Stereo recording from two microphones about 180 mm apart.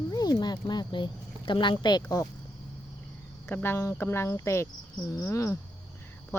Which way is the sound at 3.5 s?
10° left (ahead or behind).